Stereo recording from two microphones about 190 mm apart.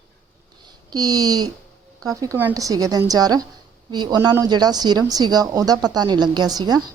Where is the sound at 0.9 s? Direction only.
20° right (ahead or behind).